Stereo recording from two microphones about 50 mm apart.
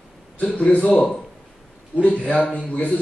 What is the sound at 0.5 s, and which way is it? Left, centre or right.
A man's voice, left.